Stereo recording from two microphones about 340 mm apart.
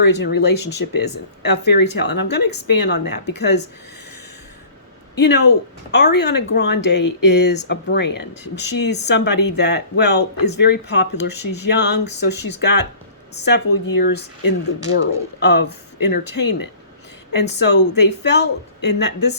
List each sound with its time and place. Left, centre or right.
0.0 s speech: left
5.1 s speech: left